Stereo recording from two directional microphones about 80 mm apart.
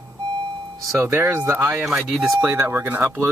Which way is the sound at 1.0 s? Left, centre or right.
Right.